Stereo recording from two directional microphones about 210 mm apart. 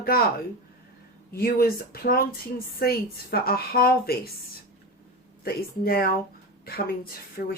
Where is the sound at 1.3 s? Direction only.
45° left (ahead or behind).